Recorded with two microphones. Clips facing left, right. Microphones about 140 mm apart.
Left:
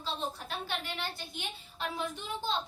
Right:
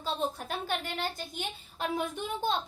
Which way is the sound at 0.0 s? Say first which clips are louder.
Right 4 dB; 45° right (ahead or behind).